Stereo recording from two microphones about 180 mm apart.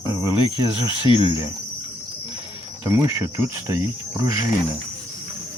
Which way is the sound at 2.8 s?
15° right (ahead or behind).